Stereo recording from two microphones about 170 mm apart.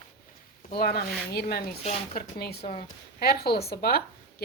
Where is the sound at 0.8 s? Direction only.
65° left (ahead or behind).